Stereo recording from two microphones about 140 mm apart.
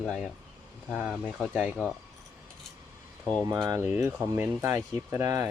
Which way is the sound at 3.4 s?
30° right (ahead or behind).